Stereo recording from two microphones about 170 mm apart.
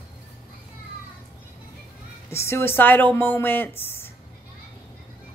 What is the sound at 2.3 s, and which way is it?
Speech, 15° left (ahead or behind).